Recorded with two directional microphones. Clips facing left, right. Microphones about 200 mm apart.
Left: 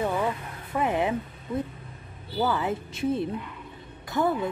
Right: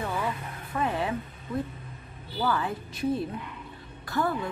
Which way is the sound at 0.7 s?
20° left (ahead or behind).